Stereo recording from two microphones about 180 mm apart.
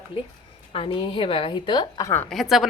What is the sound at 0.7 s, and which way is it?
A woman's voice, 30° left (ahead or behind).